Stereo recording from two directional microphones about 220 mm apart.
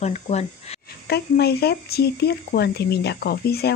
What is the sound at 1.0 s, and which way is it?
Speech, 45° left (ahead or behind).